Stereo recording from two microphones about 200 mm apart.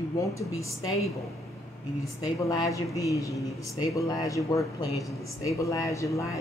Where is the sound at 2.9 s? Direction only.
15° left (ahead or behind).